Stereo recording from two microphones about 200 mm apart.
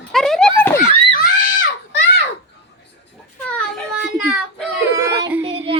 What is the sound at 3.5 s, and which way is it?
Child singing, 5° left (ahead or behind).